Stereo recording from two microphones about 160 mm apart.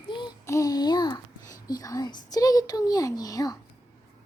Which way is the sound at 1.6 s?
25° left (ahead or behind).